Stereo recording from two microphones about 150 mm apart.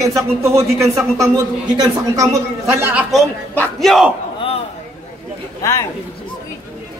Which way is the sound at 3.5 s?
10° left (ahead or behind).